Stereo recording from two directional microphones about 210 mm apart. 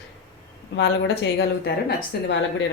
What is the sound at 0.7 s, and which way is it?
Speech, 60° left (ahead or behind).